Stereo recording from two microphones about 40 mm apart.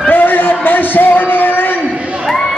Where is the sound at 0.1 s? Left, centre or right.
Left.